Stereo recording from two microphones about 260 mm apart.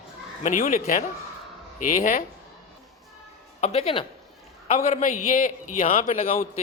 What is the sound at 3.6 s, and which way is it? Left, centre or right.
Speech, left.